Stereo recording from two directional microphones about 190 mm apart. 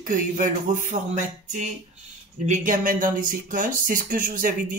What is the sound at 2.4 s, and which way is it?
Speech, 40° right (ahead or behind).